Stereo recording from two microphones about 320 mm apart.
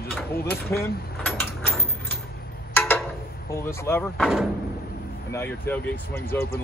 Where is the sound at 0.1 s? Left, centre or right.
Centre.